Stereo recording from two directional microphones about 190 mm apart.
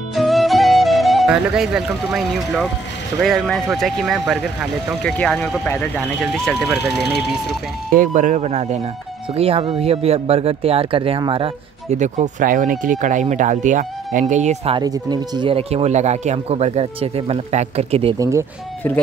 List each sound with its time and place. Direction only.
0.1 s music: centre (ahead or behind)
3.2 s speech: centre (ahead or behind)
7.9 s speech: 45° right (ahead or behind)
14.8 s speech: 20° right (ahead or behind)
18.1 s speech: 15° right (ahead or behind)